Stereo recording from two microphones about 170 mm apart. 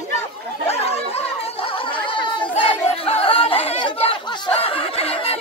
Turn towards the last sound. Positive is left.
turn(degrees=35)  # may be behind; listen again after turning